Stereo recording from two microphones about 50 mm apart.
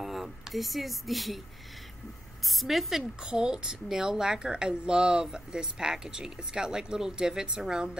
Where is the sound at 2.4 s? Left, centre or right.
Centre.